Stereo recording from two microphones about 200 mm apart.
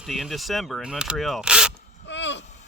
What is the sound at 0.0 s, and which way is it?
Speech, centre (ahead or behind).